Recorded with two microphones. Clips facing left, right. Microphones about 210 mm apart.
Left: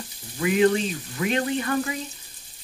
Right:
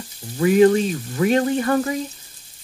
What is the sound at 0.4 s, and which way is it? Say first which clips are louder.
Speech: right 6 dB; 40° right (ahead or behind).